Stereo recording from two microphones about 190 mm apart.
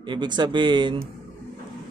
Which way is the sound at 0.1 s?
25° right (ahead or behind).